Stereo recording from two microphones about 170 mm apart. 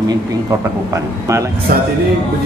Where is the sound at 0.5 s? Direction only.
15° right (ahead or behind).